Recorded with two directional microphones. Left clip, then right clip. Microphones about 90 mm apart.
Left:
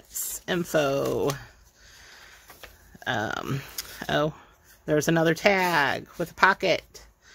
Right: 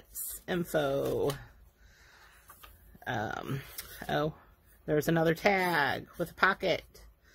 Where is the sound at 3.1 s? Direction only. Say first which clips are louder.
Left 7 dB; 35° left (ahead or behind).